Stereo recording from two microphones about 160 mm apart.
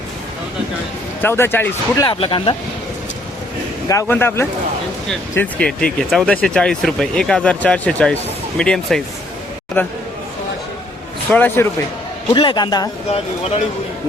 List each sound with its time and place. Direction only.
1.2 s speech: 15° left (ahead or behind)
2.0 s speech: 30° left (ahead or behind)
3.8 s speech: 15° left (ahead or behind)
11.3 s speech: 10° left (ahead or behind)
12.3 s a man's voice: 30° left (ahead or behind)